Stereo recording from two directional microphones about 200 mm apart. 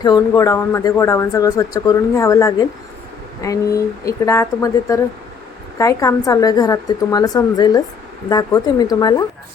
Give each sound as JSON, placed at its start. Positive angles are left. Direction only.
{"t": 0.0, "sound": "speech", "side_deg": 20}